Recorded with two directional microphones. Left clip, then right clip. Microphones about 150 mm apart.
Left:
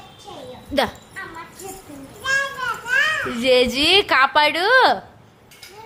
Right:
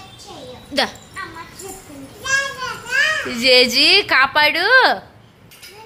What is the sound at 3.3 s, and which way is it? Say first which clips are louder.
A woman's voice: right 3 dB; 20° left (ahead or behind).